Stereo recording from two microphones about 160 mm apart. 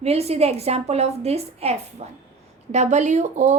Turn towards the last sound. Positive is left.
turn(degrees=-45)  # may be behind; listen again after turning